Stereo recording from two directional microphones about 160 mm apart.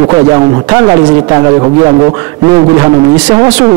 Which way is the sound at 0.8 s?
30° right (ahead or behind).